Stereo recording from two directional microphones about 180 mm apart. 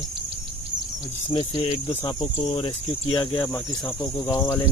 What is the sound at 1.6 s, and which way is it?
Speech, 35° left (ahead or behind).